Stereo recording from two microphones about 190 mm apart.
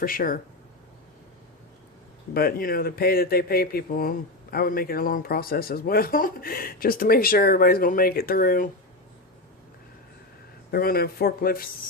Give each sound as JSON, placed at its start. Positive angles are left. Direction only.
{"t": 0.0, "sound": "speech", "side_deg": 50}
{"t": 2.3, "sound": "speech", "side_deg": 50}
{"t": 10.7, "sound": "speech", "side_deg": 55}